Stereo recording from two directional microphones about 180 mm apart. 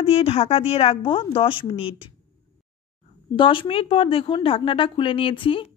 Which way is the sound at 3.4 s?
30° left (ahead or behind).